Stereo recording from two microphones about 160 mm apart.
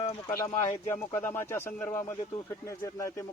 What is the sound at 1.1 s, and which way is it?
Speech, 15° left (ahead or behind).